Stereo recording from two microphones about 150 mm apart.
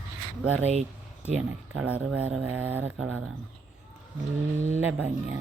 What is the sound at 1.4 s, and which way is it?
Speech, 10° right (ahead or behind).